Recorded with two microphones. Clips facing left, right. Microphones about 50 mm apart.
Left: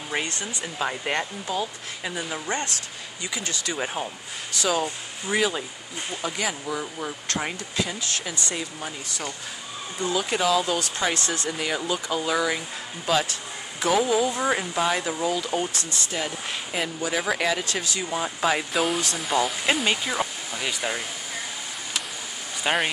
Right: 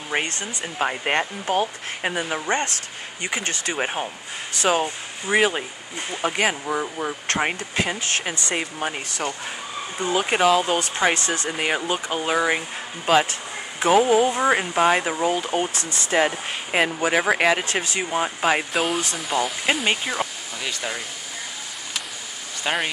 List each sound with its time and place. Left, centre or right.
0.1 s speech: right
1.5 s speech: right
6.6 s speech: right
9.9 s speech: right
14.4 s speech: right
16.1 s speech: right
18.7 s speech: centre
20.6 s speech: centre
22.6 s speech: centre